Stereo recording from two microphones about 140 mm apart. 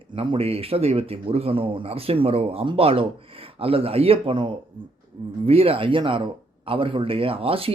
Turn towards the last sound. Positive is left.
turn(degrees=-40)  # may be behind; listen again after turning